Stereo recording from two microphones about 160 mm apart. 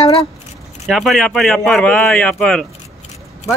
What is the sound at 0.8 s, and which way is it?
Speech, centre (ahead or behind).